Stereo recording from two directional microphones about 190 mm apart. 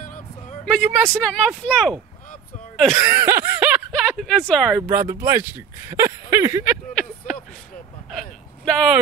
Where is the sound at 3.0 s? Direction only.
10° right (ahead or behind).